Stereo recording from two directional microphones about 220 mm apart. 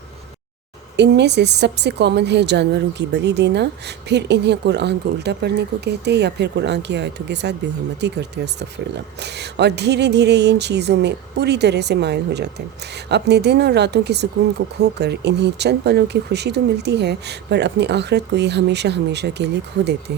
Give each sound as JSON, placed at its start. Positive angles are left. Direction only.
{"t": 0.9, "sound": "a woman's voice", "side_deg": -50}